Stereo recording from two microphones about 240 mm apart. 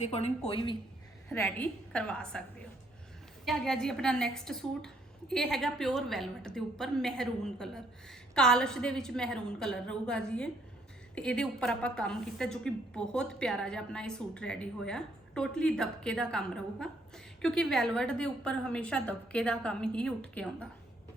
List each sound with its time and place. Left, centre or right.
0.0 s a woman's voice: left
1.3 s a woman's voice: centre
3.4 s a woman's voice: centre